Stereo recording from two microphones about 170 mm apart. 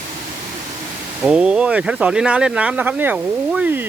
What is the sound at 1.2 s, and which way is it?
Speech, 5° right (ahead or behind).